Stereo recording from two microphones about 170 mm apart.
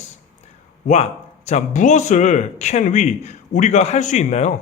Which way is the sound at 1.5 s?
45° left (ahead or behind).